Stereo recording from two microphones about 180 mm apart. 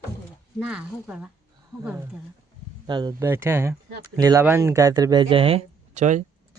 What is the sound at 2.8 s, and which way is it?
Speech, 25° right (ahead or behind).